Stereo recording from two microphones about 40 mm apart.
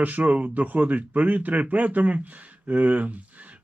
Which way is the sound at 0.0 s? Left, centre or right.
Right.